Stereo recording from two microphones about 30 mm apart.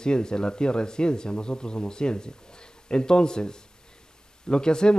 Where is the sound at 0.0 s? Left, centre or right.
Left.